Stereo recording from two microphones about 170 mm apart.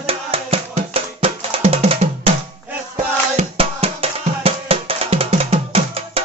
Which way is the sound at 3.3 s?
35° right (ahead or behind).